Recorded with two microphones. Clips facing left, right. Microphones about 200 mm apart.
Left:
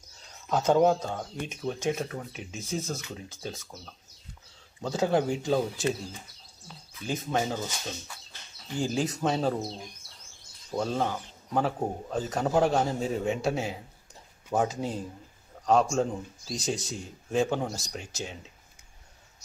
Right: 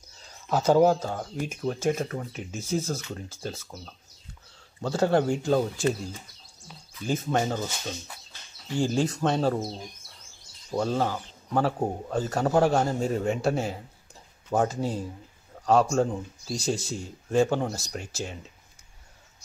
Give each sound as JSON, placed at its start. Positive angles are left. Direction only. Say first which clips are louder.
{"t": 0.5, "sound": "speech", "louder": "right 2 dB", "side_deg": -5}
{"t": 7.2, "sound": "speech", "louder": "right 1 dB", "side_deg": 0}
{"t": 8.7, "sound": "speech", "louder": "right 3 dB", "side_deg": 0}
{"t": 10.8, "sound": "speech", "louder": "right 2 dB", "side_deg": 0}